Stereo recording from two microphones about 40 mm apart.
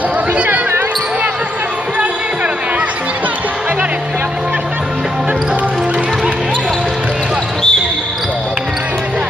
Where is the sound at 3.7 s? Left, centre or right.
Right.